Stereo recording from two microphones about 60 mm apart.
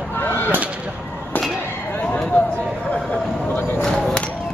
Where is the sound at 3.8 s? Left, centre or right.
Centre.